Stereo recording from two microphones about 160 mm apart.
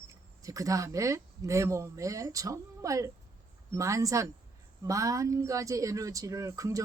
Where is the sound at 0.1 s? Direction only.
20° right (ahead or behind).